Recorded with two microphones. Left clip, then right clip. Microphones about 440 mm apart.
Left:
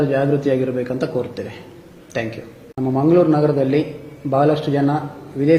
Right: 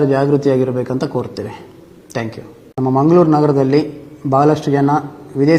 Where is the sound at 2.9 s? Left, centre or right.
Right.